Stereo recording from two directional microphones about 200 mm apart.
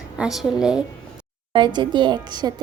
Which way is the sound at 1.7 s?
20° right (ahead or behind).